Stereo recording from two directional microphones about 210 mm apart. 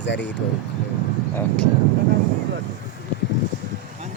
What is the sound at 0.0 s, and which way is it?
Speech, 60° left (ahead or behind).